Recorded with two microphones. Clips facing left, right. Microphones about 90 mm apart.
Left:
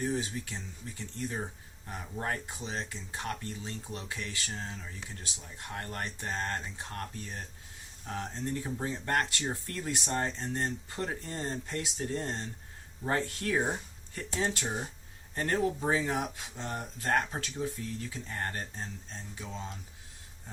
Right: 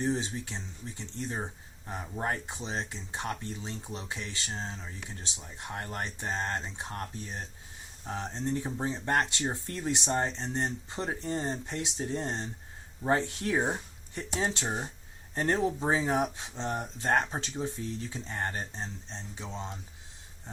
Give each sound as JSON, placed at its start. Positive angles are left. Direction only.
{"t": 0.0, "sound": "speech", "side_deg": -25}